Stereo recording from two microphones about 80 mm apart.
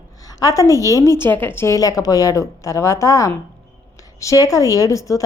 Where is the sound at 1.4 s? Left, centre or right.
Left.